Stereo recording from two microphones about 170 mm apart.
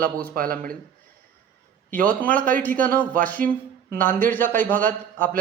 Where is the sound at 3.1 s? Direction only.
55° right (ahead or behind).